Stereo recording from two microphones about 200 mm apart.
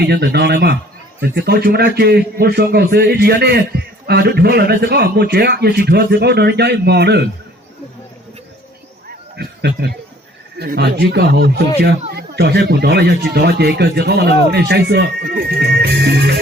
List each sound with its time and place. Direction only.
0.0 s a man's voice: 55° right (ahead or behind)
9.3 s a man's voice: 55° right (ahead or behind)